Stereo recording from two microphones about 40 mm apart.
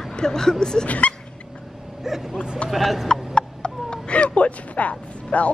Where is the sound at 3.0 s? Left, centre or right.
Centre.